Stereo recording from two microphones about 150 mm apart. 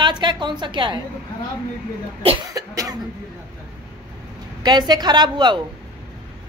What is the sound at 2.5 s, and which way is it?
Speech, 25° right (ahead or behind).